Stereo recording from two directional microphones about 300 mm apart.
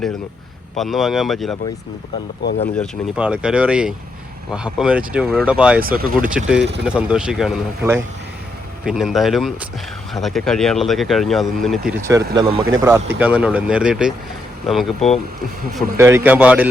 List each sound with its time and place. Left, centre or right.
0.8 s speech: centre
2.7 s speech: centre
6.0 s speech: right
6.3 s speech: centre
12.0 s speech: centre